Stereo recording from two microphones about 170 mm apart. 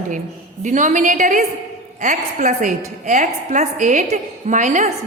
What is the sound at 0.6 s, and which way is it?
A woman's voice, 45° right (ahead or behind).